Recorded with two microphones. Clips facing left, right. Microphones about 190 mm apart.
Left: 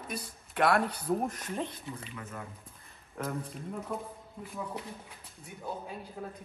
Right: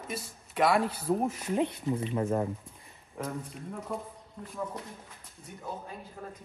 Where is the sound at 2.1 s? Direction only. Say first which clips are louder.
Right 14 dB; 40° right (ahead or behind).